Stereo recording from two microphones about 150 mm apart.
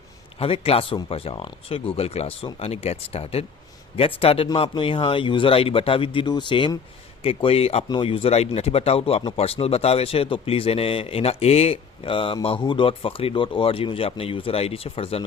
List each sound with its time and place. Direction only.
0.3 s speech: 40° left (ahead or behind)